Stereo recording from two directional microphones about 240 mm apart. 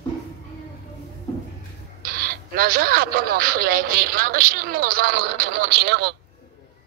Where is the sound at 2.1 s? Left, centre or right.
Right.